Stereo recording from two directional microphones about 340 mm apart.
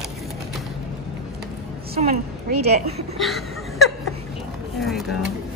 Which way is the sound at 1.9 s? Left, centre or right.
Right.